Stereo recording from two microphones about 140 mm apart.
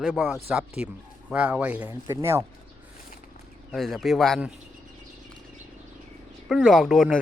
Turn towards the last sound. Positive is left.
turn(degrees=0)  # may be behind; listen again after turning